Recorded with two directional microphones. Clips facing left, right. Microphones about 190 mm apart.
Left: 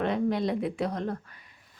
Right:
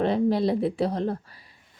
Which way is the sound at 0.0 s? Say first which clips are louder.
Right 4 dB; 35° right (ahead or behind).